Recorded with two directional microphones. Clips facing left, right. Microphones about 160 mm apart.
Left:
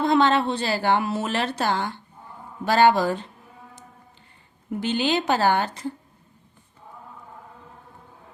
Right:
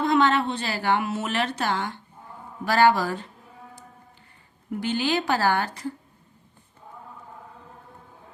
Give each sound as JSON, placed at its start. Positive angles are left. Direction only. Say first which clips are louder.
{"t": 0.0, "sound": "a woman's voice", "louder": "left 2 dB", "side_deg": 30}
{"t": 4.7, "sound": "a woman's voice", "louder": "left 2 dB", "side_deg": 20}